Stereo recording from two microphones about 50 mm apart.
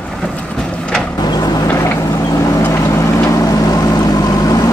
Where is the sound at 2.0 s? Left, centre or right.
Left.